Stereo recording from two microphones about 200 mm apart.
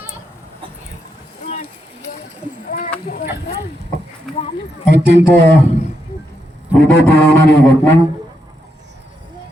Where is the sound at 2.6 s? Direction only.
40° left (ahead or behind).